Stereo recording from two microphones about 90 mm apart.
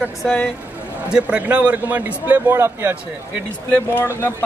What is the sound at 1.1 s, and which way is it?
A man's voice, 15° right (ahead or behind).